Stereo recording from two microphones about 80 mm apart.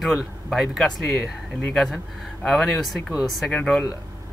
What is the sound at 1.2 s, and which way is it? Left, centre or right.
Speech, centre.